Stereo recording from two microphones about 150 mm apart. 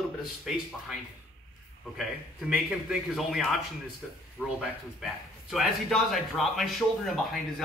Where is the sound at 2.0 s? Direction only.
5° right (ahead or behind).